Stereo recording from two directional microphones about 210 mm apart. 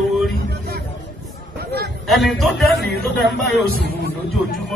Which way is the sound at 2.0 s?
Centre (ahead or behind).